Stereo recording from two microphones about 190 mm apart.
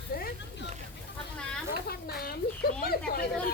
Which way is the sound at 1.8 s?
55° left (ahead or behind).